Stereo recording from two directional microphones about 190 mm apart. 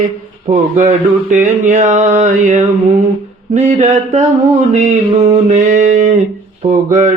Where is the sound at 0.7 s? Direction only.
40° right (ahead or behind).